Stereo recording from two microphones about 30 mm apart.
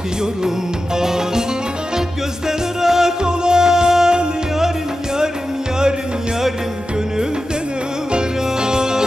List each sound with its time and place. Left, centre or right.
0.9 s music: centre
2.4 s music: centre
8.1 s music: right